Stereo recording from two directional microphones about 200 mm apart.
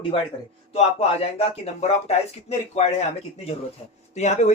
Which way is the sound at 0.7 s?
30° left (ahead or behind).